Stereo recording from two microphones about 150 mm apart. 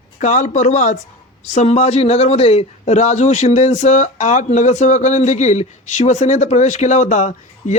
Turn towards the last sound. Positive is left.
turn(degrees=55)  # may be behind; listen again after turning